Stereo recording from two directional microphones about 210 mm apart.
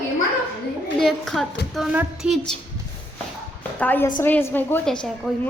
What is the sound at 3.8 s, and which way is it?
A woman's voice, 10° left (ahead or behind).